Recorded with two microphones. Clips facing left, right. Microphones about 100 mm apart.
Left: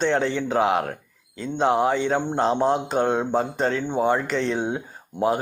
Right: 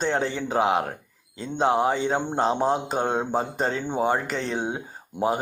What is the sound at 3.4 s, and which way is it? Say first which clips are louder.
Speech: left 3 dB; 30° right (ahead or behind).